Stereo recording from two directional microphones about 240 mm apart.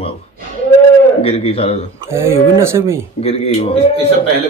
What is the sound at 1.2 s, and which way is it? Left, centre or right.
Speech, left.